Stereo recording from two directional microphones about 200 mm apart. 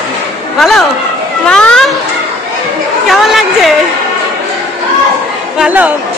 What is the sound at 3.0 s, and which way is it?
Chatter, centre (ahead or behind).